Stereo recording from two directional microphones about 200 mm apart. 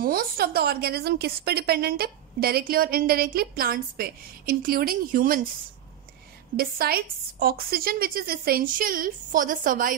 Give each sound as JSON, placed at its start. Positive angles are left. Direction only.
{"t": 0.0, "sound": "a woman's voice", "side_deg": -50}
{"t": 6.5, "sound": "a woman's voice", "side_deg": -50}